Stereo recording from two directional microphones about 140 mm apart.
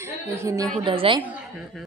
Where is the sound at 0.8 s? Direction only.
40° right (ahead or behind).